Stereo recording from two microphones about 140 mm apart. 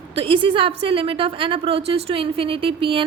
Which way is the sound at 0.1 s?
40° right (ahead or behind).